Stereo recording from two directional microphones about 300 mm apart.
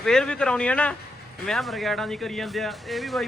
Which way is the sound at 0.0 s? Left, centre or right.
Centre.